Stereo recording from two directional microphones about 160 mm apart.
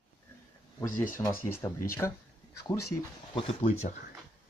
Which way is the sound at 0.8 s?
55° left (ahead or behind).